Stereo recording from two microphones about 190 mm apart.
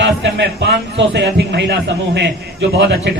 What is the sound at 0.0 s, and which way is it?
A man's voice, 70° right (ahead or behind).